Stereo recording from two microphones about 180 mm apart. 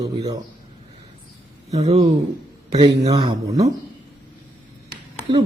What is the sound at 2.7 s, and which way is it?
Speech, 20° right (ahead or behind).